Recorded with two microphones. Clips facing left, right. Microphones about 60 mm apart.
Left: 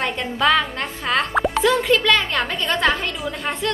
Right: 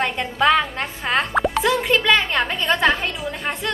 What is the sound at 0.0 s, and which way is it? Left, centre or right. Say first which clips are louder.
Music: right 1 dB; centre.